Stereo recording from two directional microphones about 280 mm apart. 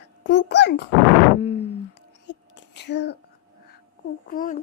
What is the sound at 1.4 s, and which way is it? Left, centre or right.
Speech, left.